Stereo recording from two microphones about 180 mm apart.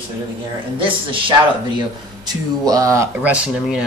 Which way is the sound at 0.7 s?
30° right (ahead or behind).